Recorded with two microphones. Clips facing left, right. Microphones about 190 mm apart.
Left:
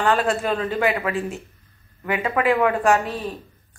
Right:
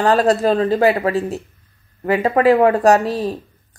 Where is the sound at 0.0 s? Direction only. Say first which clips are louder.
Right 6 dB; 40° right (ahead or behind).